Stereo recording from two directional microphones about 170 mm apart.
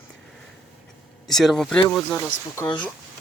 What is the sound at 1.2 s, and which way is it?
Speech, centre (ahead or behind).